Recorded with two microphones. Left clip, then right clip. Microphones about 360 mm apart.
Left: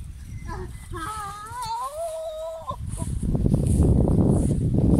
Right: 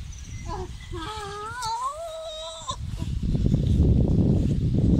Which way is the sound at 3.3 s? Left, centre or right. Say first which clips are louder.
Left 2 dB; left.